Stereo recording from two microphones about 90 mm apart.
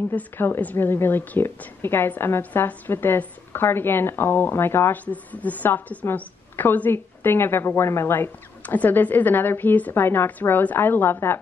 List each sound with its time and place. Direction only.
0.1 s a woman's voice: 20° left (ahead or behind)